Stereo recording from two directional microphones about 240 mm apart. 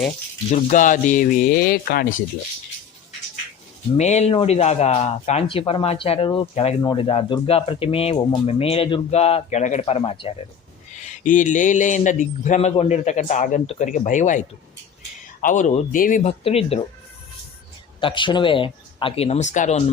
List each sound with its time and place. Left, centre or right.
0.5 s a man's voice: left
3.9 s a man's voice: left
18.0 s speech: centre